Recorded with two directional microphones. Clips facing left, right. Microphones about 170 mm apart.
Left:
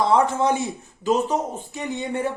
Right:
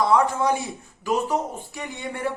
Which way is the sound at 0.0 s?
25° left (ahead or behind).